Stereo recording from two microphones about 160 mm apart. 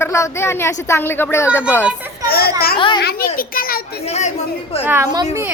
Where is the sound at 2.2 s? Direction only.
75° left (ahead or behind).